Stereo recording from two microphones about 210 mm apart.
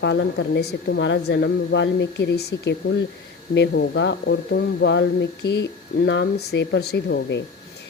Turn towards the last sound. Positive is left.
turn(degrees=55)  # may be behind; listen again after turning